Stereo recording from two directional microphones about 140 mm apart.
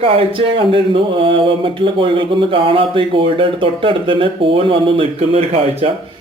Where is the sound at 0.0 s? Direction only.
40° right (ahead or behind).